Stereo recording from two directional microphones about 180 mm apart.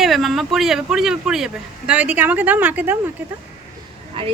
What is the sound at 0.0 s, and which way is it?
A woman's voice, centre (ahead or behind).